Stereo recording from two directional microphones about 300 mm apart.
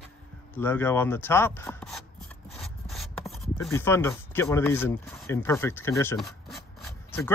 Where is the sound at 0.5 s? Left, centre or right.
Centre.